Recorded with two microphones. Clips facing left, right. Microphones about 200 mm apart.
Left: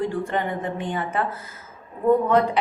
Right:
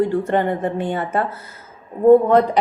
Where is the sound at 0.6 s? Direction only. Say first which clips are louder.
Right 5 dB; 40° right (ahead or behind).